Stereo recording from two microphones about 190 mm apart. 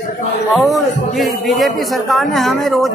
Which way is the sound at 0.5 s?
Centre (ahead or behind).